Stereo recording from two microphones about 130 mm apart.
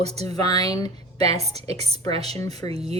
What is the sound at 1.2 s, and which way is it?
A woman's voice, 55° right (ahead or behind).